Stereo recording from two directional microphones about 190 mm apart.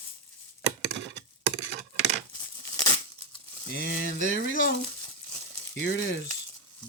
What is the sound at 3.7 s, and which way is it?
Speech, 60° left (ahead or behind).